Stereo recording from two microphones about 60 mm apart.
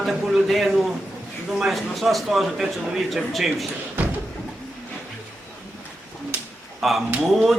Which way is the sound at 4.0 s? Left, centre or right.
Right.